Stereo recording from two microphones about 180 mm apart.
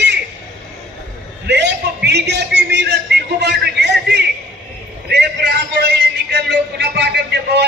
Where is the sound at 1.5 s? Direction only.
70° right (ahead or behind).